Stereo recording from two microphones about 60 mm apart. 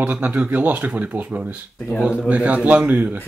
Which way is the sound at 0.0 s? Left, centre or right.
Right.